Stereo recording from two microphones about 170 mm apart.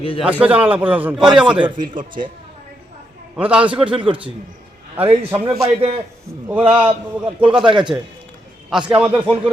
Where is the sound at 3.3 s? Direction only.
10° right (ahead or behind).